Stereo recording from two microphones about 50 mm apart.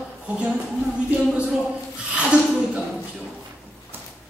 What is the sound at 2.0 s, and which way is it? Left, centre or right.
Speech, right.